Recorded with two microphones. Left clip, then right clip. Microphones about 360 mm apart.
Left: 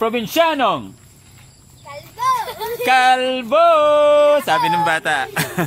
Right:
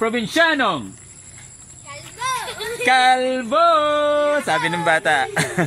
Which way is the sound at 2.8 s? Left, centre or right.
Centre.